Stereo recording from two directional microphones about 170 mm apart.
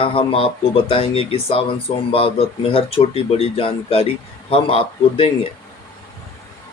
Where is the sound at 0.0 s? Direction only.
30° left (ahead or behind).